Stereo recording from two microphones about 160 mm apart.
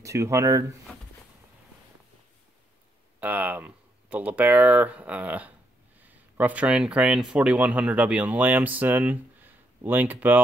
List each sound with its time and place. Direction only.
0.0 s speech: 20° right (ahead or behind)
3.2 s speech: 10° right (ahead or behind)